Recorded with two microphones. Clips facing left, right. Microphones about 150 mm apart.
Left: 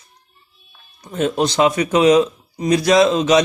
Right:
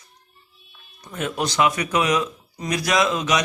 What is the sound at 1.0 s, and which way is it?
Speech, 25° left (ahead or behind).